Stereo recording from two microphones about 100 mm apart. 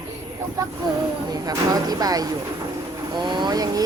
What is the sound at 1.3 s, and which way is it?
Speech, 40° right (ahead or behind).